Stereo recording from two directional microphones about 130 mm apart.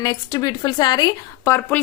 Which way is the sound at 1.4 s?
20° left (ahead or behind).